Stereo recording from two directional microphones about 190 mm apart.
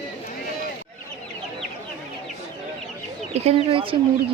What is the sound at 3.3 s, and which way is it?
Speech, 30° right (ahead or behind).